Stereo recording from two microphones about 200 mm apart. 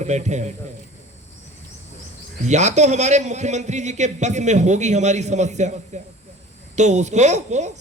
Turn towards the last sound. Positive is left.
turn(degrees=-35)  # may be behind; listen again after turning